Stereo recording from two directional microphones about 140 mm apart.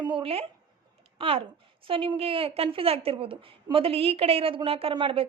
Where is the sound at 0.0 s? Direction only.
35° right (ahead or behind).